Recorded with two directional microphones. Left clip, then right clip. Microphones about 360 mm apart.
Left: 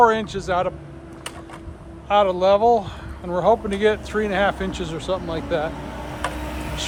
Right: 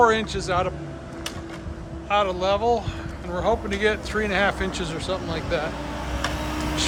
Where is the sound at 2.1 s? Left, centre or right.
Centre.